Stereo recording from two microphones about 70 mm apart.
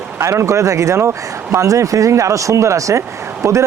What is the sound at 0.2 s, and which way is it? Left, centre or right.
Speech, right.